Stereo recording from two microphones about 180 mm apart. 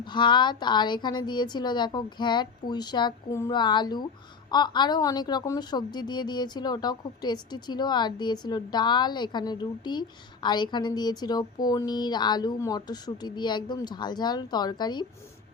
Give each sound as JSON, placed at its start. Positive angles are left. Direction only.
{"t": 0.0, "sound": "a woman's voice", "side_deg": 25}